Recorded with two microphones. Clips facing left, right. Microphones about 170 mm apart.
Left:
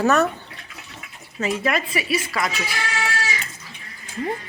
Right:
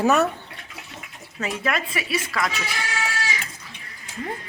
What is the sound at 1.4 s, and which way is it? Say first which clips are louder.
Speech: left 3 dB; 5° left (ahead or behind).